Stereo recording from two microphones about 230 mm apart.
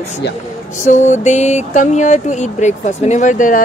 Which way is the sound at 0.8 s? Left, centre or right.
Left.